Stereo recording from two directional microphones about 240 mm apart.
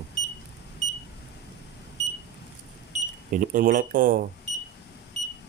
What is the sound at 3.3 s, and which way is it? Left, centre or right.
Speech, right.